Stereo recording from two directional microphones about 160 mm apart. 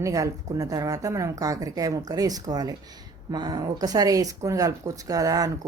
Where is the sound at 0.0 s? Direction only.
20° right (ahead or behind).